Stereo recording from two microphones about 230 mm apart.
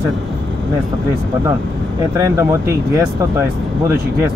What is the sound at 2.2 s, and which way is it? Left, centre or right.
Speech, centre.